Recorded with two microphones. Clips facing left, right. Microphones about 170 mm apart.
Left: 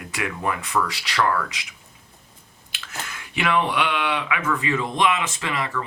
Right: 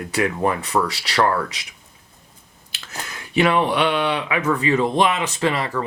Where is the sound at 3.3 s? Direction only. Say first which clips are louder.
Right 5 dB; 35° right (ahead or behind).